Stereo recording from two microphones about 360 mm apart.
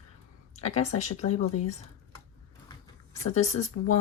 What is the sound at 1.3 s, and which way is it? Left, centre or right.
Speech, left.